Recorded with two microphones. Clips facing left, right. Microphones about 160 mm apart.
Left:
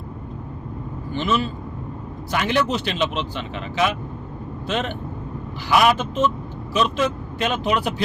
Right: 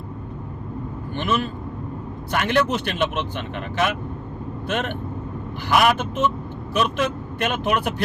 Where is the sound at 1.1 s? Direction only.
55° right (ahead or behind).